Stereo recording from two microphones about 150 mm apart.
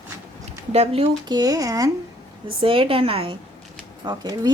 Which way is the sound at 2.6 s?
35° right (ahead or behind).